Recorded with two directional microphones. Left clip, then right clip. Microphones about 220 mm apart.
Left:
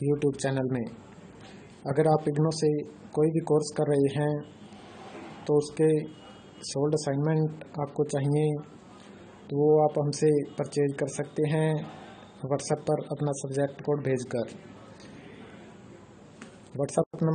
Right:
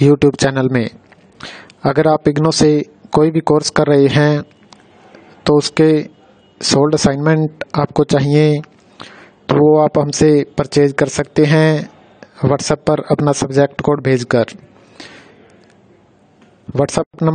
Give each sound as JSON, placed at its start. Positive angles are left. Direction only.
{"t": 0.2, "sound": "speech", "side_deg": -45}
{"t": 2.0, "sound": "speech", "side_deg": -50}
{"t": 5.4, "sound": "speech", "side_deg": -45}
{"t": 16.7, "sound": "speech", "side_deg": -45}